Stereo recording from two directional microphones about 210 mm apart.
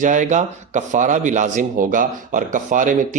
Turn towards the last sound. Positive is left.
turn(degrees=-40)  # may be behind; listen again after turning